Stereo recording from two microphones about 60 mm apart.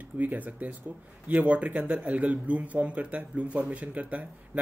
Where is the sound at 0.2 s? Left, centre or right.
Right.